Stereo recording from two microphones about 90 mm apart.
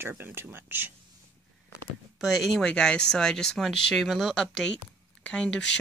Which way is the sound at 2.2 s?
Centre (ahead or behind).